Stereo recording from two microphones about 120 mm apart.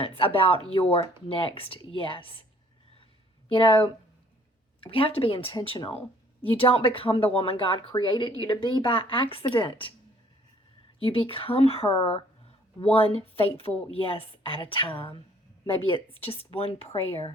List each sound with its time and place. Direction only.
0.0 s speech: 50° left (ahead or behind)
3.5 s speech: 45° left (ahead or behind)
11.0 s speech: 50° left (ahead or behind)